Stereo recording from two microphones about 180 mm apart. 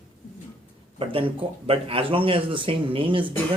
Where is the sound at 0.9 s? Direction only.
30° right (ahead or behind).